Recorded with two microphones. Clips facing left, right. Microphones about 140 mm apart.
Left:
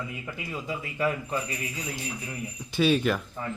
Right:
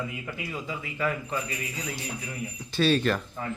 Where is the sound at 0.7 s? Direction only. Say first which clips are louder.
Left 2 dB; 35° left (ahead or behind).